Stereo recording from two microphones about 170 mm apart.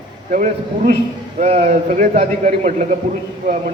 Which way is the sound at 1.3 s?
35° right (ahead or behind).